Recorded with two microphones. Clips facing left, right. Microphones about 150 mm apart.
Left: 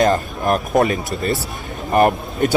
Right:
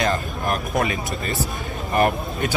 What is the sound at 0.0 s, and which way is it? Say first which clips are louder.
A man's voice: left 6 dB; 40° left (ahead or behind).